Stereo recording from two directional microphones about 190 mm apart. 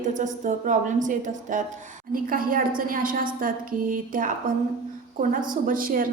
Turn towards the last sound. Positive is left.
turn(degrees=-45)  # may be behind; listen again after turning